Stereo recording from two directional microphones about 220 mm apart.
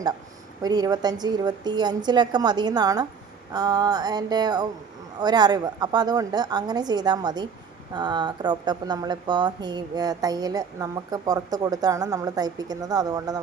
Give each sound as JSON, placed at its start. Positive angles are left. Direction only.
{"t": 0.6, "sound": "a woman's voice", "side_deg": -15}